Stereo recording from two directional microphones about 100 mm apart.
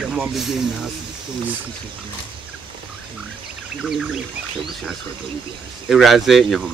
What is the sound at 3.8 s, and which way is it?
Speech, 5° right (ahead or behind).